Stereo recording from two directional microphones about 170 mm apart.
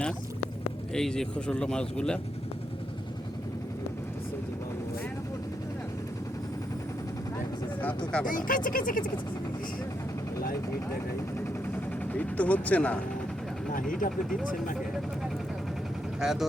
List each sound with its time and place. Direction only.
0.9 s speech: 5° left (ahead or behind)
7.8 s vehicle: 10° left (ahead or behind)
8.2 s speech: 55° left (ahead or behind)
11.3 s vehicle: 10° left (ahead or behind)
16.2 s speech: 5° right (ahead or behind)